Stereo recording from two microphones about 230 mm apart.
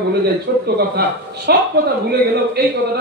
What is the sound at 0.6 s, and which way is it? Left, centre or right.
Speech, right.